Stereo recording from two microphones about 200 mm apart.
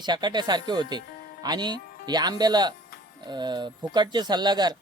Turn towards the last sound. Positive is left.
turn(degrees=-20)  # may be behind; listen again after turning